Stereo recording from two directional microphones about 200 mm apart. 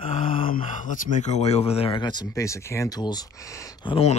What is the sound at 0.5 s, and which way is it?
Speech, 40° left (ahead or behind).